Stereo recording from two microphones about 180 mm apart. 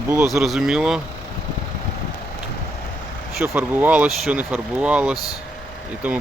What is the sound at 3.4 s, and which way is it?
Speech, 10° right (ahead or behind).